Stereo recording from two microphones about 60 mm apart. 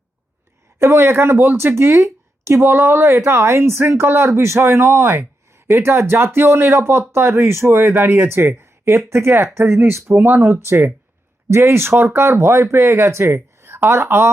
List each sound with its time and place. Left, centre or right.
0.8 s speech: right